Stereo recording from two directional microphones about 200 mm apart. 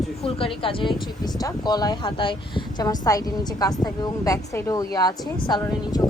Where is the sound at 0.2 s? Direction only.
30° left (ahead or behind).